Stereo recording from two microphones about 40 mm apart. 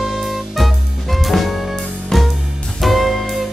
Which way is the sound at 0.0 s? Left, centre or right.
Centre.